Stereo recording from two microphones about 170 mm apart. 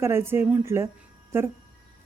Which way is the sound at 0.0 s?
15° right (ahead or behind).